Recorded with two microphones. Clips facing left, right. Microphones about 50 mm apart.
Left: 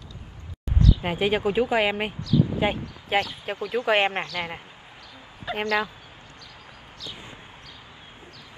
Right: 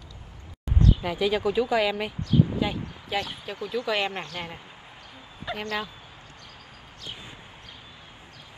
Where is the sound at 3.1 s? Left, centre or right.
Left.